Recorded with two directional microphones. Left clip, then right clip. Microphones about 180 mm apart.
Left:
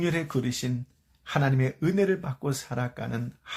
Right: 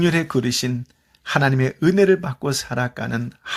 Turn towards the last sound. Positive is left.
turn(degrees=-25)  # may be behind; listen again after turning